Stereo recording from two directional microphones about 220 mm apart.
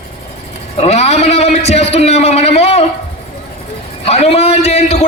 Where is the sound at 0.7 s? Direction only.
30° left (ahead or behind).